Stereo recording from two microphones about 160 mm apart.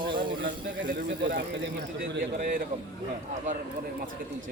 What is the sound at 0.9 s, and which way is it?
Speech, 70° right (ahead or behind).